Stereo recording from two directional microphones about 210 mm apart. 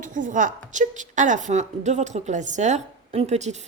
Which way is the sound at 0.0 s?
35° right (ahead or behind).